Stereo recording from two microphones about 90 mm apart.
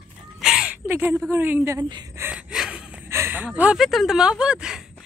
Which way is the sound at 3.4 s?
15° right (ahead or behind).